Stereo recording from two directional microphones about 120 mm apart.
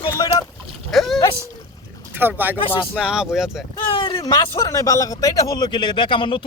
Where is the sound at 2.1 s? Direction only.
15° right (ahead or behind).